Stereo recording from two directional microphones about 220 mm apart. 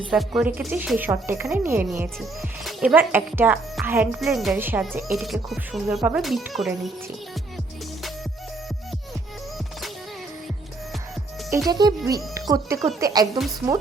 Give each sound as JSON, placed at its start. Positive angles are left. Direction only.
{"t": 0.1, "sound": "a woman's voice", "side_deg": -5}
{"t": 11.7, "sound": "a woman's voice", "side_deg": -20}